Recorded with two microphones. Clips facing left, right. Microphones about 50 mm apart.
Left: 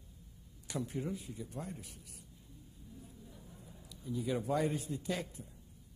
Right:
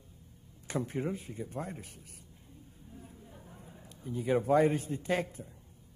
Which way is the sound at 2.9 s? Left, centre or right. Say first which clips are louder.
Right 4 dB; right.